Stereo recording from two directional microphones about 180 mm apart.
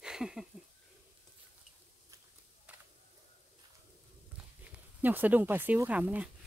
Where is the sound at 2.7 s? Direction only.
10° right (ahead or behind).